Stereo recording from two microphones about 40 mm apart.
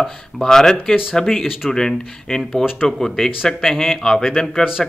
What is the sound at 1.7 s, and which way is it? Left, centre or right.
Speech, centre.